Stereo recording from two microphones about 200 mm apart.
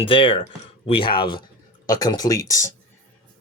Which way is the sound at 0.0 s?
25° left (ahead or behind).